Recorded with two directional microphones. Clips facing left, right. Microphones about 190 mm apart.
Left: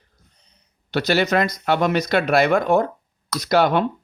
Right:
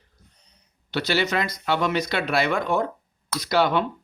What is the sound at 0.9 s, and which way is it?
Speech, 45° left (ahead or behind).